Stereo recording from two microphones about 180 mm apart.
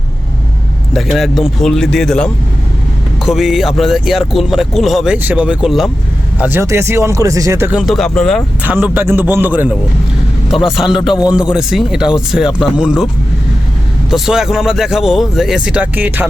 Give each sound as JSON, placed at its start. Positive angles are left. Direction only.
{"t": 0.9, "sound": "speech", "side_deg": 0}
{"t": 6.4, "sound": "speech", "side_deg": -15}
{"t": 7.7, "sound": "speech", "side_deg": -5}
{"t": 8.6, "sound": "speech", "side_deg": -10}
{"t": 14.1, "sound": "speech", "side_deg": 0}